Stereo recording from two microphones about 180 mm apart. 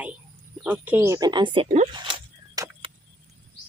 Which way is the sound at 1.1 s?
25° right (ahead or behind).